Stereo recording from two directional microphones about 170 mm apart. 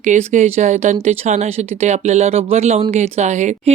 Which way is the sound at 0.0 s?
45° right (ahead or behind).